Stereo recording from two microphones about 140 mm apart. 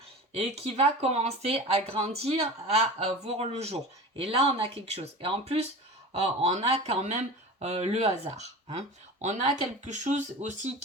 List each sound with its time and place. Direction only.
0.8 s speech: 50° right (ahead or behind)